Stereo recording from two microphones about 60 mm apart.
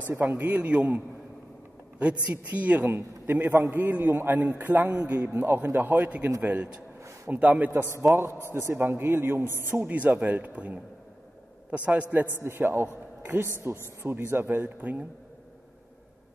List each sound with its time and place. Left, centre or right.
0.2 s speech: right
2.9 s a man's voice: right
5.9 s speech: right
8.1 s a man's voice: right
9.4 s a man's voice: left
9.7 s speech: right
12.4 s a man's voice: right